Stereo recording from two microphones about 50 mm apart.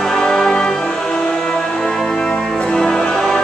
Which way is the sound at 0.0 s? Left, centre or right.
Centre.